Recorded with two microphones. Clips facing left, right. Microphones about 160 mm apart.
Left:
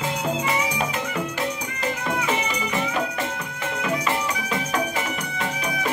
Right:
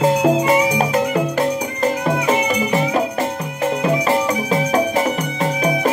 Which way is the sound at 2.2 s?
35° right (ahead or behind).